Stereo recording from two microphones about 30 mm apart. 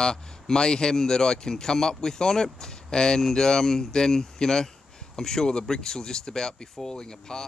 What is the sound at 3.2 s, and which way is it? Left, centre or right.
Speech, centre.